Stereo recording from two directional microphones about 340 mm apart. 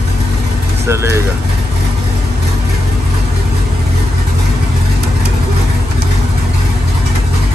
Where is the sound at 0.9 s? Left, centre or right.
Centre.